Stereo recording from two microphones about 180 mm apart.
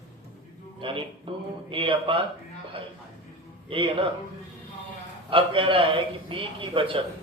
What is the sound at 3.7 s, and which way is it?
Speech, 30° right (ahead or behind).